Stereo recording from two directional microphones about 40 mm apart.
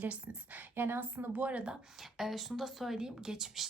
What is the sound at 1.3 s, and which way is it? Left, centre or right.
Speech, right.